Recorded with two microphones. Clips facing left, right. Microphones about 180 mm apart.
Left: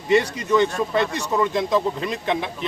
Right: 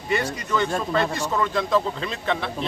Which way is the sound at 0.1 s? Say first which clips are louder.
Left 6 dB; 20° left (ahead or behind).